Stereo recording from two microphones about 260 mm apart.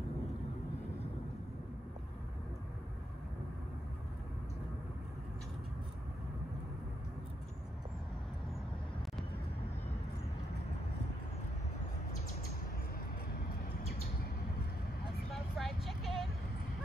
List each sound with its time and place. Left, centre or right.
13.3 s vehicle: left
15.3 s vehicle: centre